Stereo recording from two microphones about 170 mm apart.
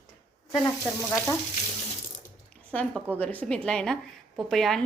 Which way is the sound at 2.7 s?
10° left (ahead or behind).